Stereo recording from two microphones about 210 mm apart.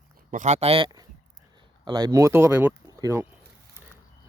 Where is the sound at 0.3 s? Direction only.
35° right (ahead or behind); by 3.2 s 15° right (ahead or behind).